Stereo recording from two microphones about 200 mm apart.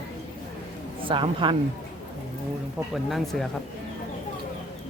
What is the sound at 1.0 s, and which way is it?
Speech, 25° right (ahead or behind).